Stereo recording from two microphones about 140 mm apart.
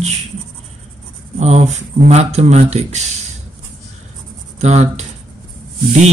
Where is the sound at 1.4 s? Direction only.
55° right (ahead or behind).